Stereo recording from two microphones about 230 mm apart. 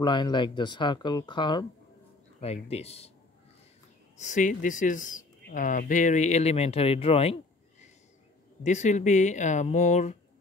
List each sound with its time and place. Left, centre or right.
0.0 s speech: centre
4.2 s speech: left
8.6 s speech: left